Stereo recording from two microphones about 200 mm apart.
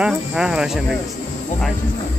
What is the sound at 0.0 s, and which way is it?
Speech, 5° right (ahead or behind).